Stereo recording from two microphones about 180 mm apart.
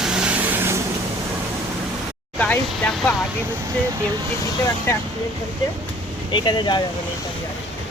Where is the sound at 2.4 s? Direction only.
5° left (ahead or behind).